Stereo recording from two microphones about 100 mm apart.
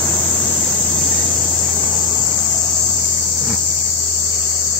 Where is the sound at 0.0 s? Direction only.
15° left (ahead or behind).